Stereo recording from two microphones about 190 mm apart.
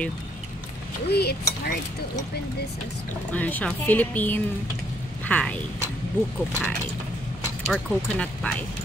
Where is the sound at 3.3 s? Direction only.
10° left (ahead or behind).